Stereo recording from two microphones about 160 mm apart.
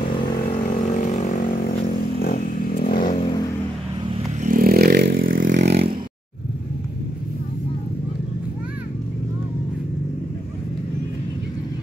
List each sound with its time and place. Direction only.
0.8 s vehicle: 50° left (ahead or behind)
2.2 s vehicle: 65° left (ahead or behind)
4.4 s vehicle: 60° right (ahead or behind)